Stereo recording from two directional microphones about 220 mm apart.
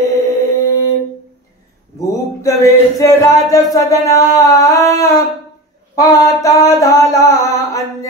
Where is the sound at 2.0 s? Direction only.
15° left (ahead or behind).